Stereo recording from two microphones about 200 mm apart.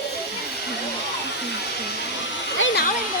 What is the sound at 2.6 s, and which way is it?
Music, 70° left (ahead or behind).